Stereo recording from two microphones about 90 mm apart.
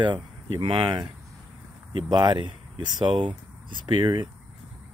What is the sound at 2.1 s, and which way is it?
Speech, 50° right (ahead or behind).